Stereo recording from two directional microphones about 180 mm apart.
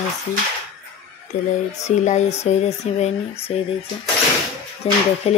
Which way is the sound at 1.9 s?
40° left (ahead or behind).